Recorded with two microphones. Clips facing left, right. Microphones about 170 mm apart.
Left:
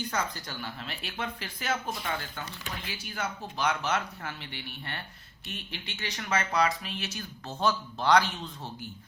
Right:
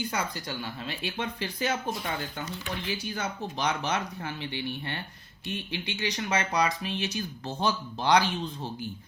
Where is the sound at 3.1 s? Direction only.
20° right (ahead or behind).